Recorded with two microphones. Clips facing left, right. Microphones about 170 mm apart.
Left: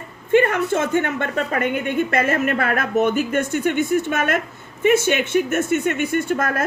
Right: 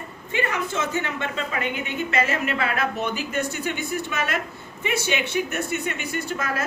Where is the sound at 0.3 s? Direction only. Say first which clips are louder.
Left 10 dB; 50° left (ahead or behind).